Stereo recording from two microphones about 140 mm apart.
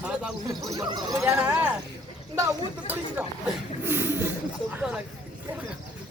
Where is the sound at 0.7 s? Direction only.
25° right (ahead or behind).